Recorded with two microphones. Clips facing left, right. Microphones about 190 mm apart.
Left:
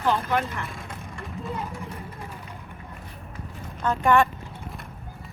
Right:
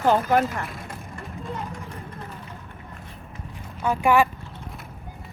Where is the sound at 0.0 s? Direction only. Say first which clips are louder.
Right 5 dB; 45° right (ahead or behind).